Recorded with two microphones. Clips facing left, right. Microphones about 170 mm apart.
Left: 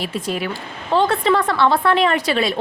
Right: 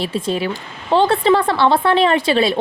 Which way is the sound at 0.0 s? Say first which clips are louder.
Right 3 dB; 30° right (ahead or behind).